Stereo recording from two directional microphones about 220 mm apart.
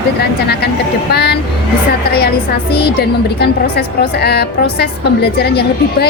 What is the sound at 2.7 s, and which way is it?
A woman's voice, 45° left (ahead or behind).